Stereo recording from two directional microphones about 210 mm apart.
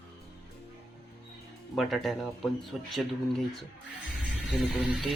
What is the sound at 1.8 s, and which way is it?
Speech, centre (ahead or behind).